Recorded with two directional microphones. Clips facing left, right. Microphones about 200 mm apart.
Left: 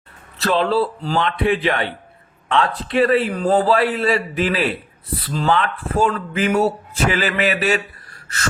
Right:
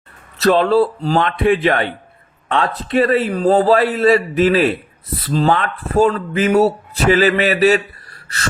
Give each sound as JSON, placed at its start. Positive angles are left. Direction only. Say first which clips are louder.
{"t": 0.3, "sound": "speech", "louder": "right 5 dB", "side_deg": -45}